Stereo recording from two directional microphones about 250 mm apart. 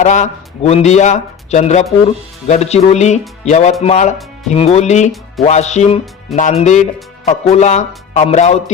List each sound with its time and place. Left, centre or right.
0.0 s speech: left